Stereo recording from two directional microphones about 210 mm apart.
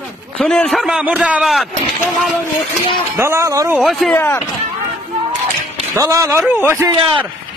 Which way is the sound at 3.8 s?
Centre (ahead or behind).